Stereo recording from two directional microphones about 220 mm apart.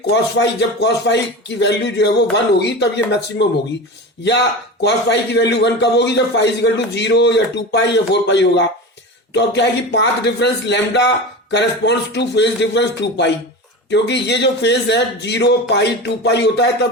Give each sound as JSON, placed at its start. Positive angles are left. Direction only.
{"t": 0.1, "sound": "a man's voice", "side_deg": 50}
{"t": 4.8, "sound": "a man's voice", "side_deg": 50}